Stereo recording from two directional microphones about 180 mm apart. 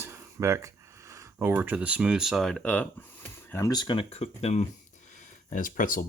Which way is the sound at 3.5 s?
20° left (ahead or behind).